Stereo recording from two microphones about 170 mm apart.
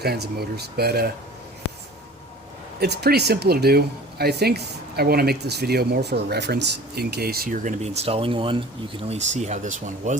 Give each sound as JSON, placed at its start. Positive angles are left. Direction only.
{"t": 0.0, "sound": "speech", "side_deg": -70}
{"t": 2.8, "sound": "speech", "side_deg": -70}